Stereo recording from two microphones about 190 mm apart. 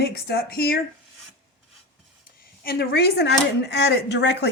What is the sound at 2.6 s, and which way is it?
Speech, 50° left (ahead or behind).